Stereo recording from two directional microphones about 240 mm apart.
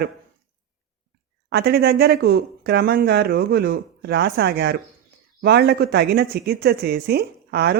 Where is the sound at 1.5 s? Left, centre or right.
Right.